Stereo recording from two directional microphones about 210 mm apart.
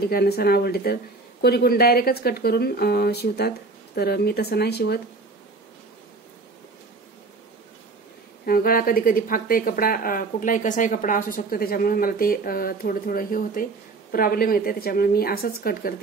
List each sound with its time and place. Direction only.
0.0 s speech: 50° left (ahead or behind)
8.5 s speech: 45° left (ahead or behind)